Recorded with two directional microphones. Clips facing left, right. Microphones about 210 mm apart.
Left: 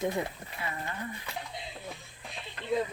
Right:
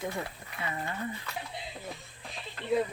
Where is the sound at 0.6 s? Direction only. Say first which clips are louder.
Right 2 dB; 25° right (ahead or behind).